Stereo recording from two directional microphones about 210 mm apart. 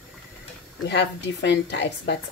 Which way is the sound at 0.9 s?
55° left (ahead or behind).